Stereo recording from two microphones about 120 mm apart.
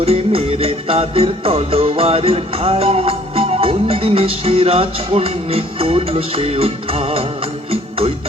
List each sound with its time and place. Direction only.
0.0 s music: 55° right (ahead or behind)